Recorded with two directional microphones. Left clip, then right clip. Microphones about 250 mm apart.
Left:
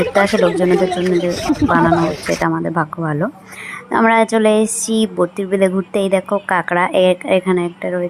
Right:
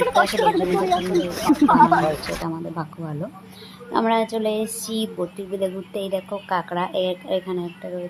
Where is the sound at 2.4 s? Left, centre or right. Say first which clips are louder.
Left 12 dB; left.